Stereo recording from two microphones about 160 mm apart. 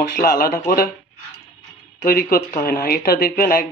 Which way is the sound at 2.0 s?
70° left (ahead or behind).